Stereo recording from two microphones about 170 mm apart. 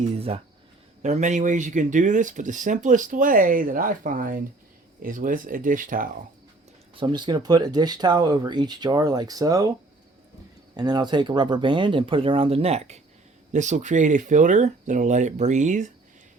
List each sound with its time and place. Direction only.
1.0 s speech: 45° right (ahead or behind)
6.9 s speech: 25° right (ahead or behind)
10.8 s speech: 25° right (ahead or behind); by 15.9 s 45° right (ahead or behind)